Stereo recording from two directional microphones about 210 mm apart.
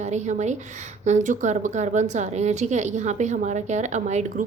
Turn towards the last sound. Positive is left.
turn(degrees=-35)  # may be behind; listen again after turning